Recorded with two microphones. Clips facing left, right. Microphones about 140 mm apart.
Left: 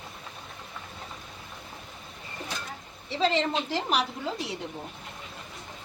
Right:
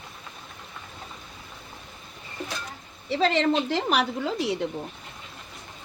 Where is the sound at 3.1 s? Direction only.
60° right (ahead or behind).